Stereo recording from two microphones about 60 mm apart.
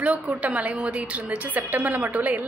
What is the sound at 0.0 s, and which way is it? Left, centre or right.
A woman's voice, right.